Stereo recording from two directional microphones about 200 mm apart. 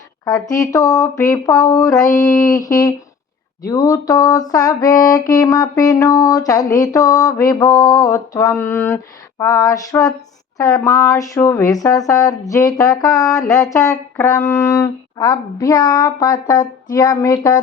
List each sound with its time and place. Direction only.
0.3 s music: 15° left (ahead or behind)